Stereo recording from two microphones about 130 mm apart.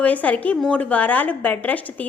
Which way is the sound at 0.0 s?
10° left (ahead or behind).